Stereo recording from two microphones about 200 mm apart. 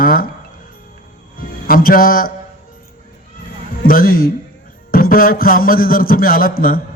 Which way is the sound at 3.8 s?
45° left (ahead or behind).